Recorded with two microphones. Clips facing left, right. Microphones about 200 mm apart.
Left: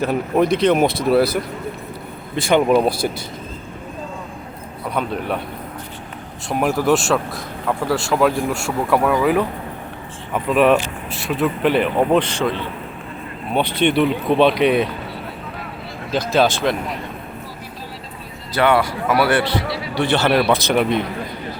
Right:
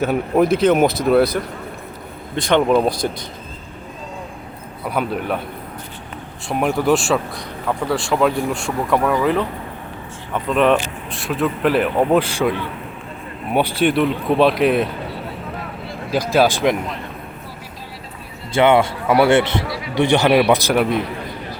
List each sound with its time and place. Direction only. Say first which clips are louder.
0.0 s speech: right 1 dB; centre (ahead or behind)
4.9 s speech: right 1 dB; 5° right (ahead or behind)
6.5 s speech: even; centre (ahead or behind)
16.1 s a man's voice: right 1 dB; 10° right (ahead or behind)
18.5 s a man's voice: right 3 dB; 25° right (ahead or behind); by 21.0 s 5° right (ahead or behind)